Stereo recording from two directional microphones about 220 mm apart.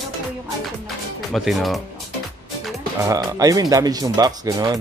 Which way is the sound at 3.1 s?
15° right (ahead or behind).